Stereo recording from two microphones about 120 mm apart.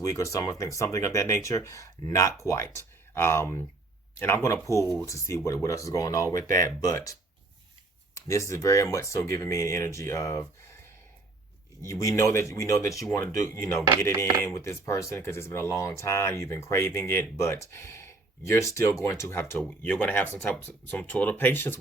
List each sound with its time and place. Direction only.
0.0 s speech: 25° left (ahead or behind)
11.8 s speech: 25° left (ahead or behind)